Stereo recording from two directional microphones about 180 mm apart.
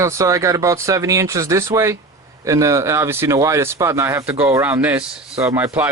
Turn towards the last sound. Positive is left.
turn(degrees=-15)  # may be behind; listen again after turning